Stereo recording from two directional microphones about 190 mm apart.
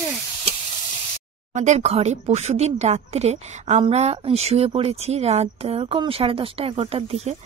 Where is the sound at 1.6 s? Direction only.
35° right (ahead or behind).